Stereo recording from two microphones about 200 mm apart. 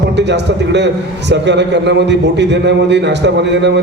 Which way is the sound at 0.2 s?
60° right (ahead or behind).